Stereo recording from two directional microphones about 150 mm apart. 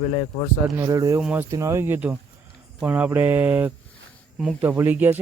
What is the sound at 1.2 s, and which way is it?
Speech, 5° right (ahead or behind).